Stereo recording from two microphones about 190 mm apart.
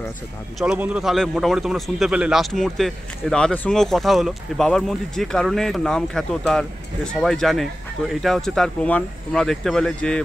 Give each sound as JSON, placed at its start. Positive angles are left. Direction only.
{"t": 0.6, "sound": "a man's voice", "side_deg": -5}